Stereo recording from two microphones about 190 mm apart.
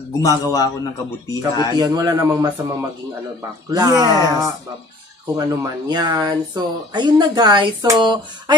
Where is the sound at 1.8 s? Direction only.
20° right (ahead or behind).